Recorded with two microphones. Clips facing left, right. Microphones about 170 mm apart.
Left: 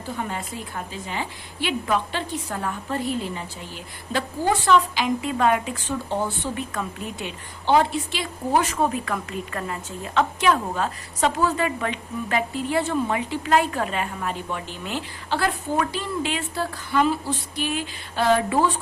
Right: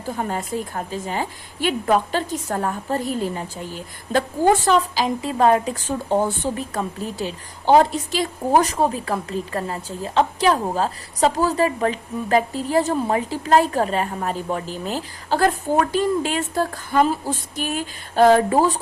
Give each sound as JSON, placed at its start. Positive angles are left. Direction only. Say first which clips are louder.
{"t": 0.2, "sound": "a woman's voice", "louder": "right 8 dB", "side_deg": -40}